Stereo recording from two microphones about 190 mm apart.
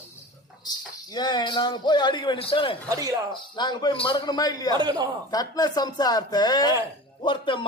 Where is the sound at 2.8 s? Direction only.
15° right (ahead or behind).